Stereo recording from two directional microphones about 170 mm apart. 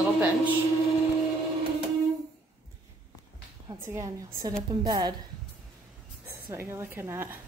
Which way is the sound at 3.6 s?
15° right (ahead or behind).